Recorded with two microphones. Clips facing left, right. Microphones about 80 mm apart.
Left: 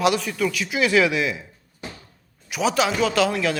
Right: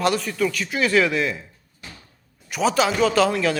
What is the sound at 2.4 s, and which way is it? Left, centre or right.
A man's voice, centre.